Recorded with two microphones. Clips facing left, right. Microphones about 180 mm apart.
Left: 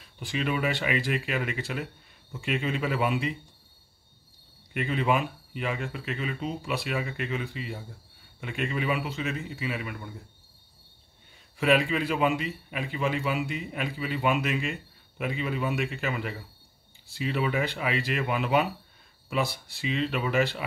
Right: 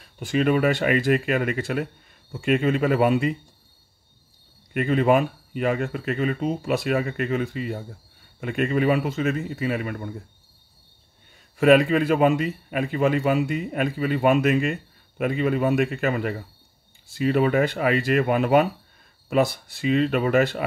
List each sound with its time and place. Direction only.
0.0 s a man's voice: 50° right (ahead or behind)
4.7 s a man's voice: 45° right (ahead or behind)
11.5 s a man's voice: 50° right (ahead or behind)